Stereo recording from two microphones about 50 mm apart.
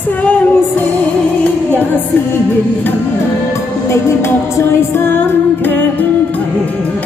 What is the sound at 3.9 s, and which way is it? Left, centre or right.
Music, left.